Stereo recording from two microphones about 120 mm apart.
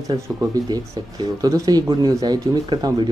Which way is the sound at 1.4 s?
30° right (ahead or behind).